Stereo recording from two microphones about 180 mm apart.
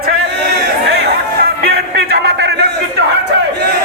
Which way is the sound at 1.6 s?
60° right (ahead or behind).